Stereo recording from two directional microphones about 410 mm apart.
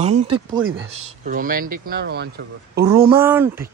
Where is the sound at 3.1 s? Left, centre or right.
Centre.